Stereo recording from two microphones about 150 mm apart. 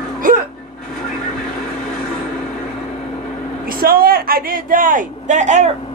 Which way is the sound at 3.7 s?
75° right (ahead or behind).